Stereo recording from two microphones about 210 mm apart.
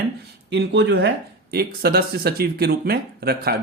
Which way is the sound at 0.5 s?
55° right (ahead or behind).